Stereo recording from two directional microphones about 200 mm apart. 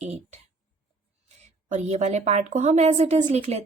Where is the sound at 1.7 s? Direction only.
35° right (ahead or behind).